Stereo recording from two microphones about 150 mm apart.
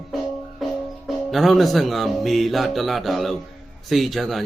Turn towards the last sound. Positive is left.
turn(degrees=0)  # may be behind; listen again after turning